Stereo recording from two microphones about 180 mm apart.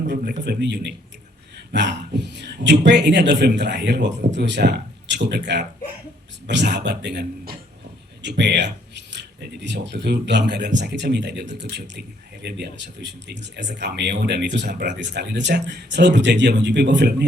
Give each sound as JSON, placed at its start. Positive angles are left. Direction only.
{"t": 0.1, "sound": "a man's voice", "side_deg": -70}